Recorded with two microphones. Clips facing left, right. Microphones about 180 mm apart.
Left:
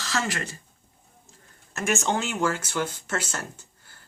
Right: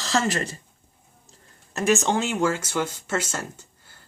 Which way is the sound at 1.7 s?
35° right (ahead or behind).